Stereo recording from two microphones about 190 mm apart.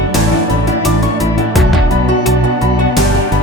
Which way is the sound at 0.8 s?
Centre (ahead or behind).